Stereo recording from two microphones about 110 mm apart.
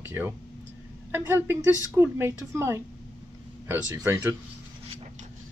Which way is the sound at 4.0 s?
30° right (ahead or behind).